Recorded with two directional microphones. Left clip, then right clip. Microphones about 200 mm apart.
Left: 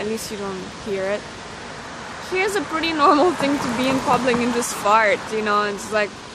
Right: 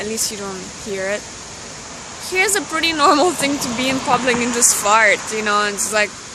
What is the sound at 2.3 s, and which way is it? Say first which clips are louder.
Speech: right 4 dB; 10° right (ahead or behind).